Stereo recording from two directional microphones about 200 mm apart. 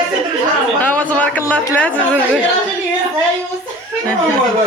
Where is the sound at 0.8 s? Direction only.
10° left (ahead or behind).